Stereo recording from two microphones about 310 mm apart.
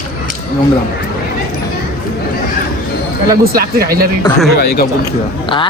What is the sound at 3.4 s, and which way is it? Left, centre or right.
Speech, right.